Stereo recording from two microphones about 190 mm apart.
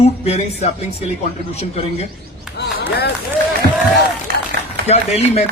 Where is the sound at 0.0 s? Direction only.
35° left (ahead or behind).